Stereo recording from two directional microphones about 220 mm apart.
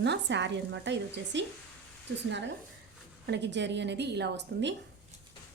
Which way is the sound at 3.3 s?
50° right (ahead or behind).